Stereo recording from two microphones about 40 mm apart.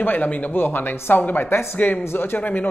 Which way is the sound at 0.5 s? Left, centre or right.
Left.